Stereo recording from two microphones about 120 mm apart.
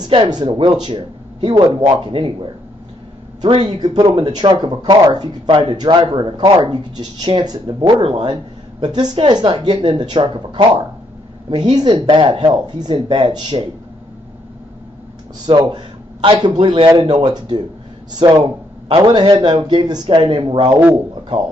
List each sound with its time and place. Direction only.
0.0 s speech: 35° right (ahead or behind)
15.4 s speech: 40° right (ahead or behind)